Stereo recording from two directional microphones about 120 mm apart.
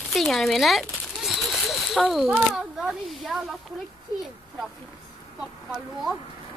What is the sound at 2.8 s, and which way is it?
Speech, 5° right (ahead or behind).